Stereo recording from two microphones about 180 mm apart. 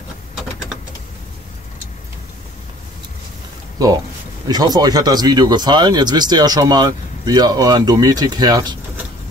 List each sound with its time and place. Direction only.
4.5 s speech: 20° right (ahead or behind)